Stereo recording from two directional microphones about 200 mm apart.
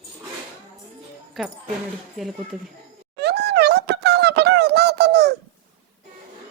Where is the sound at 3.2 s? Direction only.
55° right (ahead or behind).